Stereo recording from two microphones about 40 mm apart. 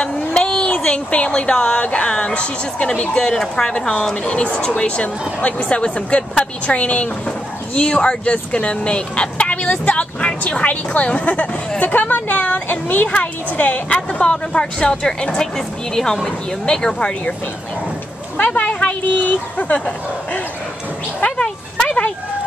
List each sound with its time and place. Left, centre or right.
0.0 s a sound: centre
1.1 s speech: left
3.2 s speech: centre; by 11.3 s left
11.8 s a woman's voice: left
13.1 s speech: left; by 17.1 s centre
18.4 s speech: left
19.0 s a woman's voice: left
21.8 s a sound: left